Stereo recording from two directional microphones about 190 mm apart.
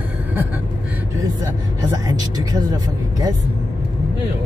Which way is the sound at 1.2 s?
20° right (ahead or behind).